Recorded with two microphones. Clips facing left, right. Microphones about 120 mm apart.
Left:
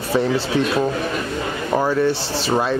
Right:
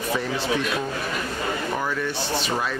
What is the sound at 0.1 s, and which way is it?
A man's voice, 35° left (ahead or behind).